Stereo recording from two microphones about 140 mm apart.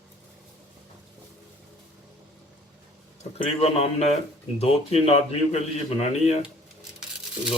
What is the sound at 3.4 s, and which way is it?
A man's voice, 50° left (ahead or behind).